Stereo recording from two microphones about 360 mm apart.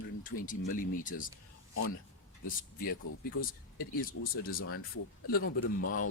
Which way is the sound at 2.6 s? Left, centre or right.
Left.